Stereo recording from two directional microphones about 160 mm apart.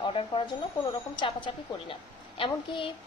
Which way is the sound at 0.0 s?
30° left (ahead or behind).